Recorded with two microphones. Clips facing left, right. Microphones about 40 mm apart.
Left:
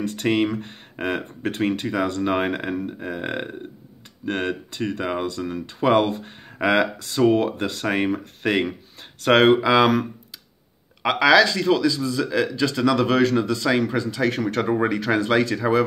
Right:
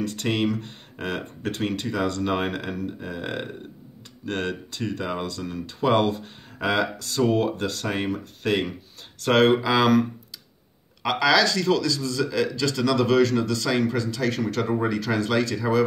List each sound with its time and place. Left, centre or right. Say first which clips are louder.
0.0 s a man's voice: left 3 dB; left
6.6 s a man's voice: left 4 dB; left
11.0 s a man's voice: left 4 dB; left